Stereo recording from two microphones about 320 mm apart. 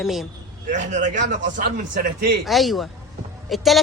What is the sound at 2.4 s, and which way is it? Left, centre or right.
Speech, centre.